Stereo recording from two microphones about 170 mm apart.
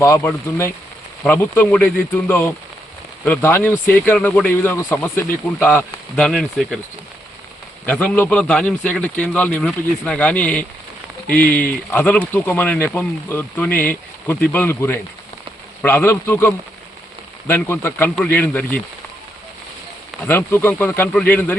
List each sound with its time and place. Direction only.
0.0 s speech: 15° left (ahead or behind)
7.9 s speech: 10° left (ahead or behind)
20.2 s speech: 15° left (ahead or behind)